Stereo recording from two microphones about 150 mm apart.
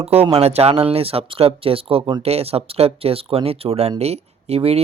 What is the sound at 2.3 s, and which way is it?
Speech, 45° right (ahead or behind).